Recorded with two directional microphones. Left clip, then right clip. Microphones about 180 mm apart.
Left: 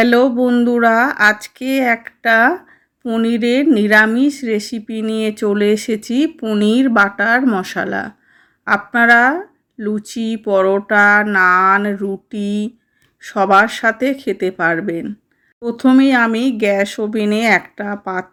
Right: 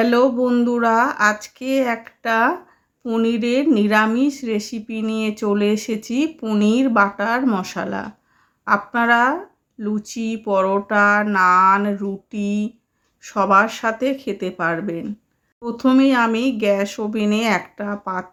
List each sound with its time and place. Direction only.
0.0 s speech: 20° left (ahead or behind)